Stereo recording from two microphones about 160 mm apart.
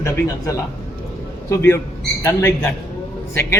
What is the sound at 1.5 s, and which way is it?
A man's voice, 15° left (ahead or behind).